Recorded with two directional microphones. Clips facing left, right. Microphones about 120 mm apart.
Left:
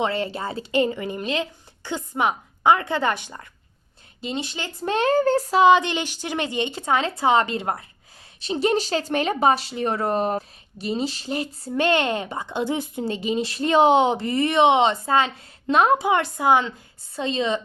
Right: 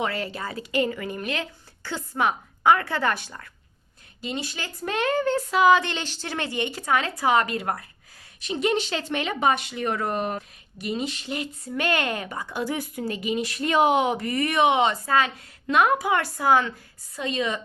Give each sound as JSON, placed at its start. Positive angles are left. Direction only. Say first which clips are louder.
{"t": 0.0, "sound": "speech", "louder": "left 4 dB", "side_deg": 25}